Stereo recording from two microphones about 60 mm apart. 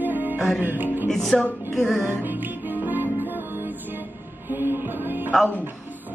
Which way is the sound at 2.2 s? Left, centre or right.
Right.